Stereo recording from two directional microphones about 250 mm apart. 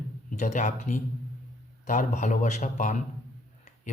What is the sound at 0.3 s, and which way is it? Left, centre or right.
Speech, left.